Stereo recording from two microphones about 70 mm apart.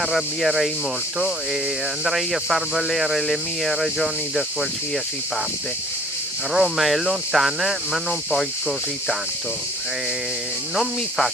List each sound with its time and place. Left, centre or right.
0.0 s speech: centre
2.0 s speech: centre
6.5 s speech: centre
10.8 s speech: centre